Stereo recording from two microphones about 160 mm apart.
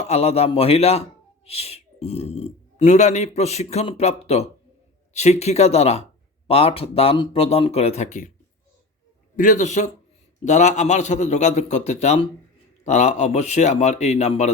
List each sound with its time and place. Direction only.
0.0 s a man's voice: 40° left (ahead or behind)
9.3 s a man's voice: 55° left (ahead or behind)